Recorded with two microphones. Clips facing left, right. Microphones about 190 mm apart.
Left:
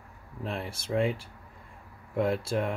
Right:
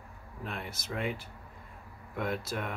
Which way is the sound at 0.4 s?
30° left (ahead or behind).